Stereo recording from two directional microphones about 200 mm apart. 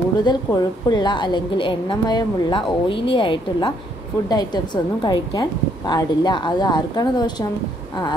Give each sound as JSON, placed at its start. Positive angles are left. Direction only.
{"t": 0.2, "sound": "a woman's voice", "side_deg": 20}